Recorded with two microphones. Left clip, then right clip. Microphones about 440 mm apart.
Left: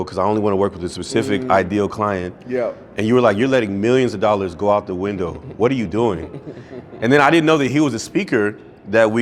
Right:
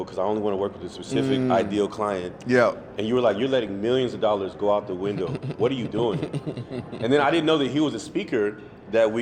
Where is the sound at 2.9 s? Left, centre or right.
Left.